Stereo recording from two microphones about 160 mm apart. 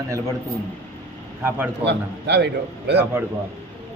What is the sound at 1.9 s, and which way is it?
Speech, 90° right.